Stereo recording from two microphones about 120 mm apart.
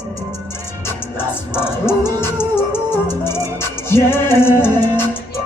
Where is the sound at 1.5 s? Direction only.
20° left (ahead or behind).